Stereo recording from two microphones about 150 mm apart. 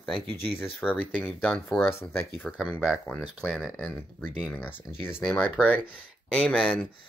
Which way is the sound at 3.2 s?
5° right (ahead or behind).